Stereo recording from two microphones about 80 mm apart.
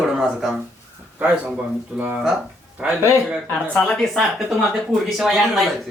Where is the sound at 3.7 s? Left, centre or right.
Centre.